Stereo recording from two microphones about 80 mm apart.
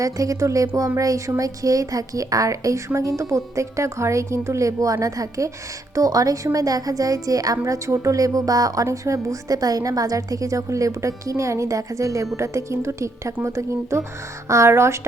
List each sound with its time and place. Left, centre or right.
0.0 s a woman's voice: right